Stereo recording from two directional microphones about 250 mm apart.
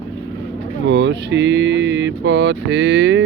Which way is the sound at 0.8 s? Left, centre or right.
Right.